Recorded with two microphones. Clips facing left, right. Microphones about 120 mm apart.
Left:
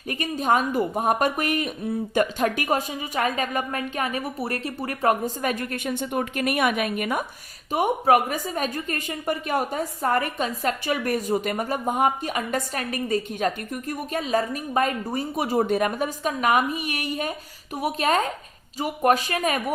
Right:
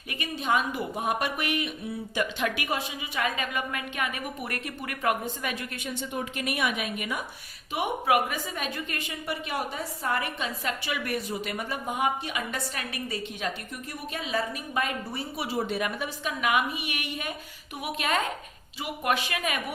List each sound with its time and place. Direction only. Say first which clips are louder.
0.1 s a woman's voice: left 5 dB; 40° left (ahead or behind)